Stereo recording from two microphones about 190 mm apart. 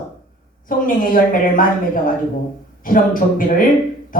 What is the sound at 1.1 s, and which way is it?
A woman's voice, 45° left (ahead or behind).